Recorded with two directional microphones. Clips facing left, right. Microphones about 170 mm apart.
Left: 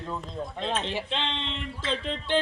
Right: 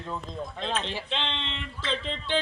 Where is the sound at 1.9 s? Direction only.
5° left (ahead or behind).